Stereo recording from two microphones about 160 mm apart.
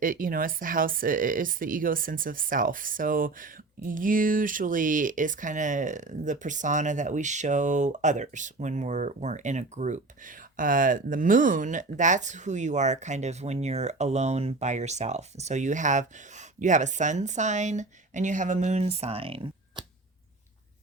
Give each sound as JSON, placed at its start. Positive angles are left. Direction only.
{"t": 0.0, "sound": "speech", "side_deg": -60}